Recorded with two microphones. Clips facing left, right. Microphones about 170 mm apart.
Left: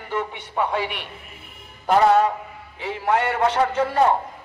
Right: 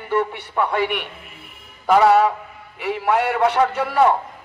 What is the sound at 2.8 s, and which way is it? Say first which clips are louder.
A man's voice: right 2 dB; 70° right (ahead or behind).